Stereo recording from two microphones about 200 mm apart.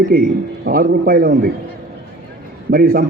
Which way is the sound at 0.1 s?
50° right (ahead or behind).